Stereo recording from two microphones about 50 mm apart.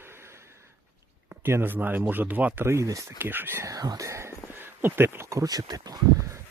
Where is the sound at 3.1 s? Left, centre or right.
Right.